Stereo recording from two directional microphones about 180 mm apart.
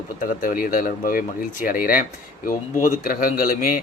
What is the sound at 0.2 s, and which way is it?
Speech, 50° left (ahead or behind).